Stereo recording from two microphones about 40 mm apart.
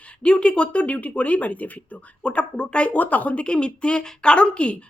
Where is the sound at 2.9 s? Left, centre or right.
Left.